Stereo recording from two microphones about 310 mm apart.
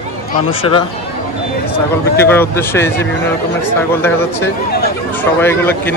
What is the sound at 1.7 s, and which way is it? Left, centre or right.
Speech, centre.